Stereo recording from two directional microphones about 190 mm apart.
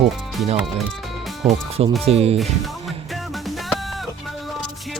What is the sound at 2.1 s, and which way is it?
Speech, 30° right (ahead or behind).